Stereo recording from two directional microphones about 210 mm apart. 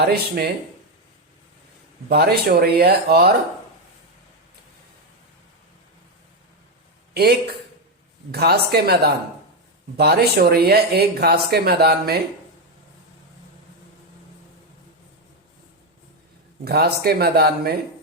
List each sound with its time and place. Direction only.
0.0 s speech: 50° right (ahead or behind)
2.0 s speech: 50° right (ahead or behind)
7.1 s speech: 50° right (ahead or behind)
16.6 s speech: 50° right (ahead or behind)